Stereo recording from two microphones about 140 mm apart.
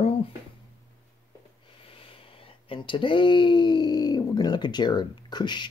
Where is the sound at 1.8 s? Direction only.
40° left (ahead or behind).